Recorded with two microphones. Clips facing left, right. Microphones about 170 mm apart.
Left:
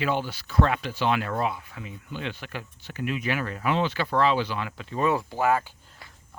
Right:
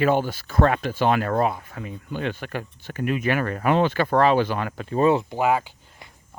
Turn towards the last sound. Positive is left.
turn(degrees=-15)  # may be behind; listen again after turning